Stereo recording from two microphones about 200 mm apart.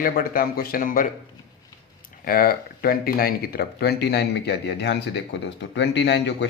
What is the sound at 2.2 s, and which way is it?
Speech, 45° left (ahead or behind).